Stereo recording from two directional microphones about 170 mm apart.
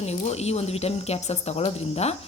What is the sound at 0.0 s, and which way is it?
Speech, 40° left (ahead or behind).